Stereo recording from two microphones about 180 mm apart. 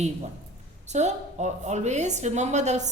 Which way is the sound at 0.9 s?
40° right (ahead or behind).